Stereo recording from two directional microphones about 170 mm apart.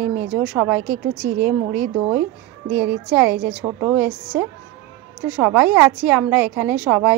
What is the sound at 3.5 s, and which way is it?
Speech, 5° right (ahead or behind).